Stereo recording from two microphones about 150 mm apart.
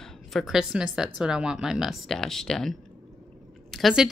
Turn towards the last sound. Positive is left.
turn(degrees=0)  # may be behind; listen again after turning